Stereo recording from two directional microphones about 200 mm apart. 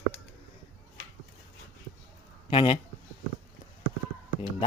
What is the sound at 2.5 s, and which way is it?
Speech, 25° left (ahead or behind).